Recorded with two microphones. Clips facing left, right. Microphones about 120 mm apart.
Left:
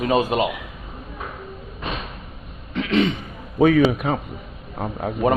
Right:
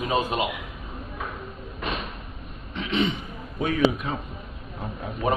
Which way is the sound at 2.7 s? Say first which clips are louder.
Left 5 dB; 90° left.